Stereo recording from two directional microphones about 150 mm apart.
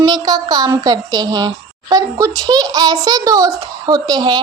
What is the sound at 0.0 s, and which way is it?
Speech, 30° right (ahead or behind).